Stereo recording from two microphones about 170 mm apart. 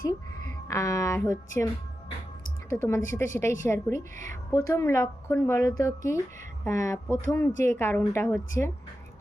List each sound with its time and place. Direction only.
0.7 s a woman's voice: 20° left (ahead or behind)
2.6 s a woman's voice: 15° left (ahead or behind)